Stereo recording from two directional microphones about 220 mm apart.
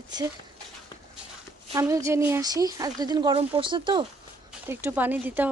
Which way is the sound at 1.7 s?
15° right (ahead or behind).